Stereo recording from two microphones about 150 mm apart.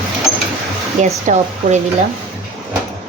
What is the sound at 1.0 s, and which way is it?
Speech, 50° right (ahead or behind).